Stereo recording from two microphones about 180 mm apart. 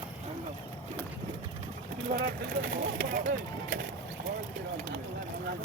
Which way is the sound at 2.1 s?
55° right (ahead or behind).